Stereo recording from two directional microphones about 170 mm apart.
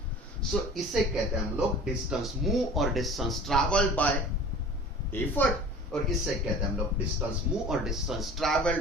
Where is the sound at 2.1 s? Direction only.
Centre (ahead or behind).